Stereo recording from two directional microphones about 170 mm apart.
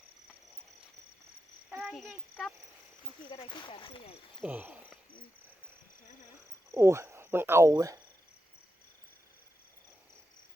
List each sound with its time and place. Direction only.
1.7 s speech: centre (ahead or behind)
3.2 s speech: 30° left (ahead or behind)
4.4 s a sound: 10° right (ahead or behind)
6.7 s speech: 15° right (ahead or behind)